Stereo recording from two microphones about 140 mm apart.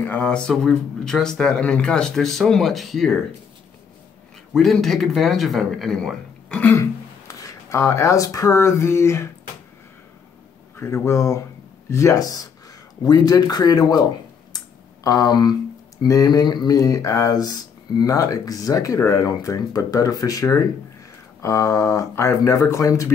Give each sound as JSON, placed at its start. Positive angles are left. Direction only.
{"t": 0.0, "sound": "speech", "side_deg": 10}
{"t": 4.6, "sound": "speech", "side_deg": 0}
{"t": 10.8, "sound": "speech", "side_deg": 20}
{"t": 15.0, "sound": "speech", "side_deg": 25}